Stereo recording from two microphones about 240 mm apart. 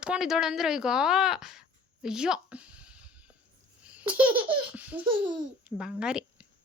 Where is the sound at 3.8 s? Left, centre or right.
Centre.